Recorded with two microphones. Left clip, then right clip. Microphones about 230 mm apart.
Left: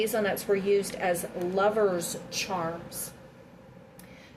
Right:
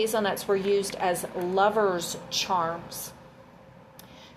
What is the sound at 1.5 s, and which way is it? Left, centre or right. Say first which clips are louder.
Speech: right 2 dB; right.